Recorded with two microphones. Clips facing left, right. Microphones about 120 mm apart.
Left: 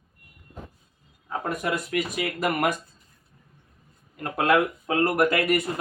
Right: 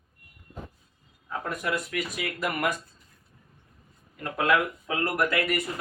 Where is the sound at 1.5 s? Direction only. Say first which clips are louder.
Left 3 dB; 55° left (ahead or behind).